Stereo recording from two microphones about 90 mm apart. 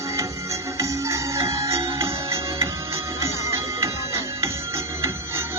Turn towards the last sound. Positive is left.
turn(degrees=-30)  # may be behind; listen again after turning